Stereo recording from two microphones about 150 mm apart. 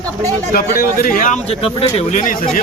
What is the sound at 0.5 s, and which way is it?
A man's voice, 75° left (ahead or behind).